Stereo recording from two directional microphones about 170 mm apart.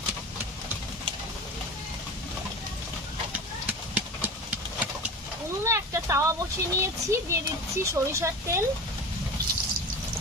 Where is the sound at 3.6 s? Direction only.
10° right (ahead or behind).